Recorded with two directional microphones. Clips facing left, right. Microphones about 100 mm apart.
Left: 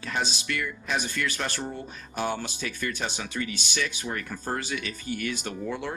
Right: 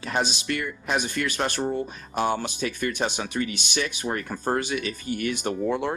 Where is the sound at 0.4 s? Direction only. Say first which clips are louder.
Right 3 dB; 40° right (ahead or behind).